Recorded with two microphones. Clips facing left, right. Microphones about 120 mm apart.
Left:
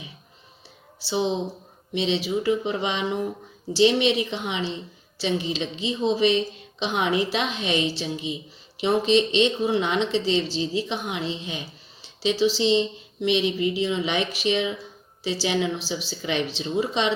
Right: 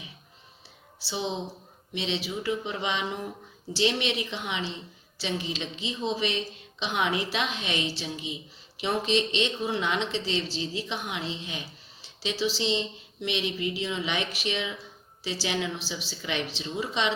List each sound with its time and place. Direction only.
1.0 s speech: 25° left (ahead or behind)